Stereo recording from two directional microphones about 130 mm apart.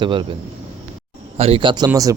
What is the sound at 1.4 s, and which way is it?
Speech, 45° right (ahead or behind).